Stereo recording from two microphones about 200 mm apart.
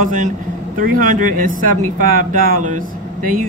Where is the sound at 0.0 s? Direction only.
40° right (ahead or behind).